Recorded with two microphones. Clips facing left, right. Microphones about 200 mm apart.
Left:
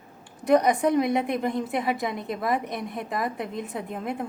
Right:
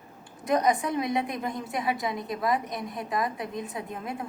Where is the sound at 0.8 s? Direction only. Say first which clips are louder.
Left 6 dB; 55° left (ahead or behind).